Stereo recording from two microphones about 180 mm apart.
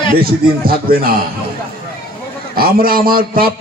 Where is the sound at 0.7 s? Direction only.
55° right (ahead or behind).